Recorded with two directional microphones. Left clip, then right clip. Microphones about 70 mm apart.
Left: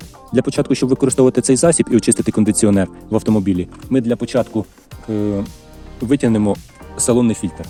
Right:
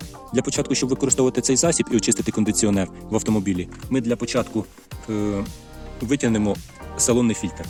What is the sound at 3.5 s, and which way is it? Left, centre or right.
Speech, left.